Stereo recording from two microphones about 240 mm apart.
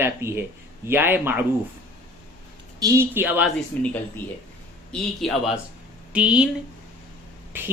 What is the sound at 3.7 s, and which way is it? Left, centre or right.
Speech, centre.